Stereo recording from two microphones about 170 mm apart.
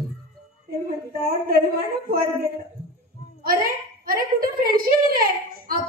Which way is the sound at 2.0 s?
60° right (ahead or behind).